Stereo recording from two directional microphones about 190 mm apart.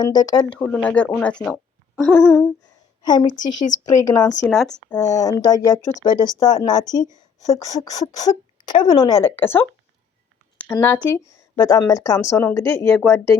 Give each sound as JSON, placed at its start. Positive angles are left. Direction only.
{"t": 0.0, "sound": "speech", "side_deg": 20}
{"t": 0.5, "sound": "a woman's voice", "side_deg": 5}
{"t": 3.0, "sound": "speech", "side_deg": 20}
{"t": 4.4, "sound": "a woman's voice", "side_deg": 0}